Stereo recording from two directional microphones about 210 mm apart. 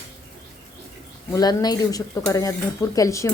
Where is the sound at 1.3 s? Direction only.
20° left (ahead or behind).